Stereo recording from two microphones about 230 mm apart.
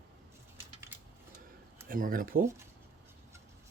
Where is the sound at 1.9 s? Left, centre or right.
Right.